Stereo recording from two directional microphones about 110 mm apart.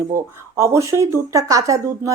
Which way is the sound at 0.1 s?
25° right (ahead or behind).